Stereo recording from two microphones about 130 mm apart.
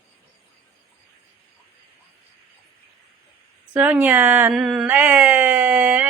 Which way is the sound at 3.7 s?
10° right (ahead or behind).